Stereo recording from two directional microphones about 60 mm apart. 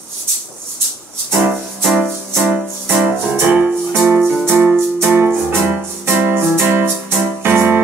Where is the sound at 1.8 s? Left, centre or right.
Centre.